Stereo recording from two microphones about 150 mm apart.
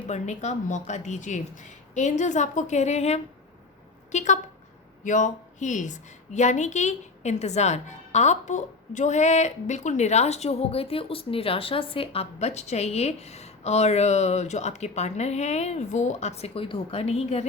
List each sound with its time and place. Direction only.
0.1 s a woman's voice: 50° left (ahead or behind)